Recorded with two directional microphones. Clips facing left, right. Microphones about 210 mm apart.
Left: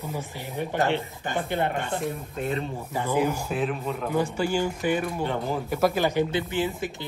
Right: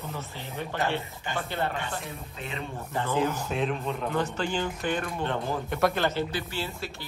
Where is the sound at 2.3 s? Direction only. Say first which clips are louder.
Left 9 dB; 45° left (ahead or behind).